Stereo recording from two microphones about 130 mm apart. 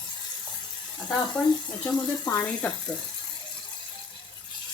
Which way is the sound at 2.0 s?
25° left (ahead or behind).